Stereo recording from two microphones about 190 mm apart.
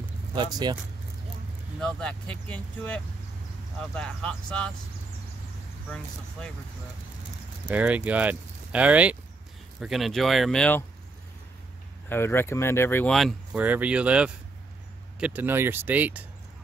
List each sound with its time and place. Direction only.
0.3 s speech: 20° right (ahead or behind)
1.8 s speech: 5° left (ahead or behind)
7.6 s speech: 5° right (ahead or behind)
12.1 s speech: 10° left (ahead or behind); by 16.3 s 10° right (ahead or behind)